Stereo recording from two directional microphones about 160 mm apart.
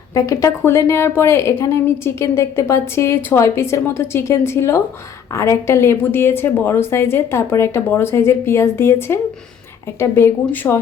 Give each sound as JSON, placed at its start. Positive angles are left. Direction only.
{"t": 0.1, "sound": "a woman's voice", "side_deg": 20}